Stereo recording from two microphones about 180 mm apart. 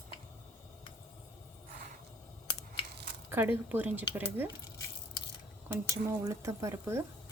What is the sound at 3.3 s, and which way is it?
Speech, 10° right (ahead or behind).